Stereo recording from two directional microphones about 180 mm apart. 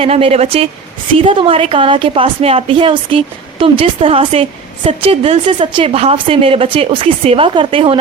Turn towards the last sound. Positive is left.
turn(degrees=-30)  # may be behind; listen again after turning